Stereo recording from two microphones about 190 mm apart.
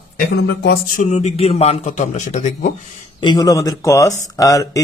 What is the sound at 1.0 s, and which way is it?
A man's voice, 35° left (ahead or behind).